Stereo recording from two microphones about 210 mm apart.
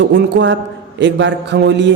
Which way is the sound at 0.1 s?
60° right (ahead or behind).